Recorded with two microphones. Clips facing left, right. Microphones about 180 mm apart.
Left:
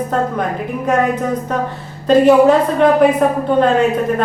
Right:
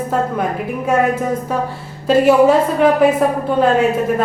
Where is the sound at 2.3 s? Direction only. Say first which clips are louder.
Even; 5° right (ahead or behind).